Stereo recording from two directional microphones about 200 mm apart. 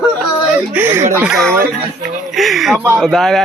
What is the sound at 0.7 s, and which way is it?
Speech, 10° right (ahead or behind).